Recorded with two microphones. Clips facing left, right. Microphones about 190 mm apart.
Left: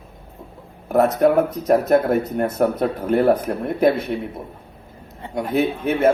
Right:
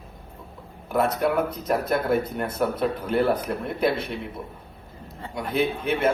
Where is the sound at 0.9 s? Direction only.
45° left (ahead or behind).